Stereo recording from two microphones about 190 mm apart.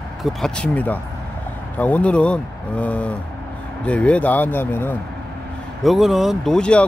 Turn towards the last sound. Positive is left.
turn(degrees=5)  # may be behind; listen again after turning